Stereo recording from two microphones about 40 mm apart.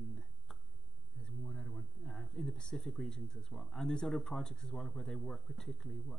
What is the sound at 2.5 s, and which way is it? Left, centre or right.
Speech, centre.